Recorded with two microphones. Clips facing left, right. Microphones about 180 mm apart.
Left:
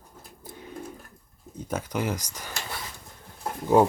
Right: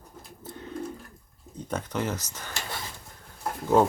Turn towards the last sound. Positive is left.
turn(degrees=15)  # may be behind; listen again after turning